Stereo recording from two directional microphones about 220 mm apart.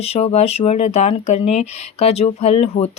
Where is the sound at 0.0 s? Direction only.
30° left (ahead or behind).